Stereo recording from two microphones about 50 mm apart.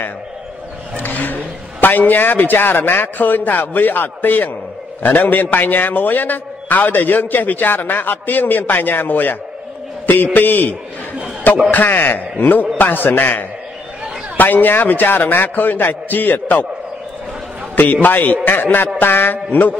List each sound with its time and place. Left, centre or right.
1.0 s a man's voice: left
18.0 s a man's voice: left